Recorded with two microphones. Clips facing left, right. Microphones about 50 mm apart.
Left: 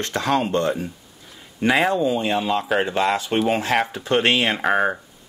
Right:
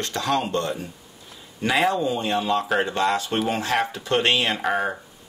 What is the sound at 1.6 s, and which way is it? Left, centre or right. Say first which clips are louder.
Speech: left 3 dB; centre.